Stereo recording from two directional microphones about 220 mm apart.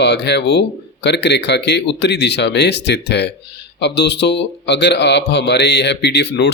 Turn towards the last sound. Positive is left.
turn(degrees=50)  # may be behind; listen again after turning